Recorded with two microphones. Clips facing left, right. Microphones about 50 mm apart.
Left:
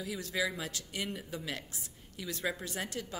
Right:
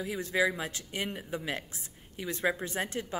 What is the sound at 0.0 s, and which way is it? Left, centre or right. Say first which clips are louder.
Speech: right 6 dB; right.